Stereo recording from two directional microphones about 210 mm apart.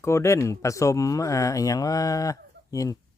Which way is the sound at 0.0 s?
15° left (ahead or behind).